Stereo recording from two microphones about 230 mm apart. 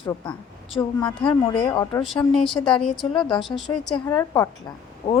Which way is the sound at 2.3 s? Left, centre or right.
Centre.